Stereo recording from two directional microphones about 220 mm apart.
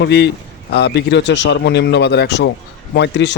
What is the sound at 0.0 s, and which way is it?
A man's voice, 50° left (ahead or behind).